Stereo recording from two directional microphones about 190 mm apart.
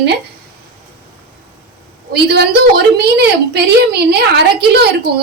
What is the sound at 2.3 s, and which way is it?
A woman's voice, 60° right (ahead or behind).